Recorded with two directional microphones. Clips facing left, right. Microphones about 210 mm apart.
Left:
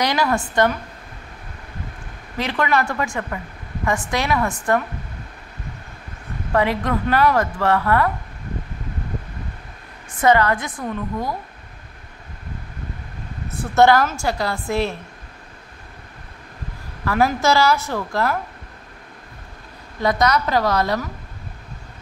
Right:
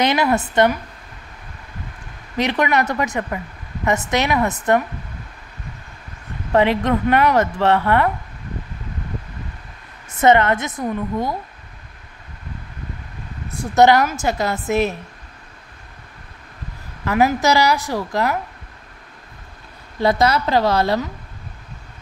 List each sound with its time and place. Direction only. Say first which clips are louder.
0.0 s speech: right 3 dB; 20° right (ahead or behind)
2.3 s speech: right 2 dB; 20° right (ahead or behind)
6.5 s speech: right 4 dB; 25° right (ahead or behind)
10.2 s speech: right 2 dB; 25° right (ahead or behind)
13.7 s speech: right 1 dB; 20° right (ahead or behind)
17.0 s a woman's voice: right 2 dB; 20° right (ahead or behind)
20.0 s speech: right 2 dB; 30° right (ahead or behind)